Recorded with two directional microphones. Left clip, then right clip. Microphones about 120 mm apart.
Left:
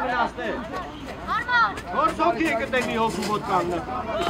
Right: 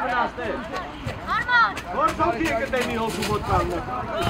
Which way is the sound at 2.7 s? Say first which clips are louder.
Left 1 dB; 50° left (ahead or behind).